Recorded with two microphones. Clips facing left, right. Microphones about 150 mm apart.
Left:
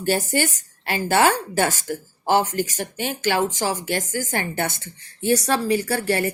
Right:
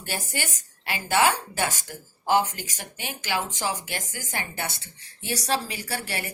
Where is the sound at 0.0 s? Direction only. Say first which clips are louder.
Left 11 dB; 45° left (ahead or behind).